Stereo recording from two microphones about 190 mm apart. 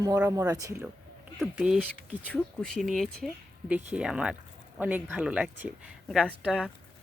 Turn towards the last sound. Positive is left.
turn(degrees=0)  # may be behind; listen again after turning